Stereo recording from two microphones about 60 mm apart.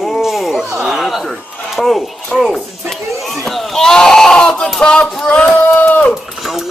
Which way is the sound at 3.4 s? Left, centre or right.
Centre.